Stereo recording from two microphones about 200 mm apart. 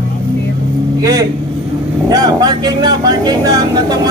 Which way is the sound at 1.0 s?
15° right (ahead or behind).